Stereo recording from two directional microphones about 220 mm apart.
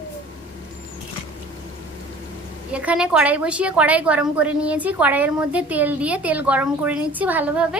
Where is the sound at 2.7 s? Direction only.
5° right (ahead or behind).